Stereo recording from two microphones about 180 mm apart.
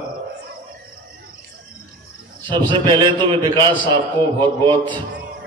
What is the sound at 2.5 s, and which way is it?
A man's voice, 25° right (ahead or behind).